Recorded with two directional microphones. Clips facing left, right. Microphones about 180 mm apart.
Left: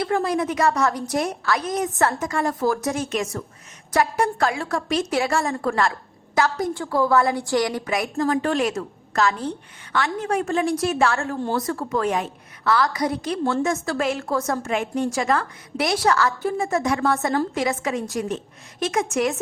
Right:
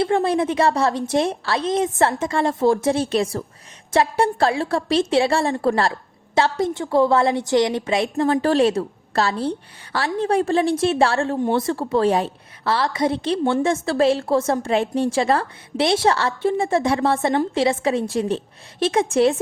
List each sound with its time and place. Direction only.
0.0 s a woman's voice: 30° right (ahead or behind)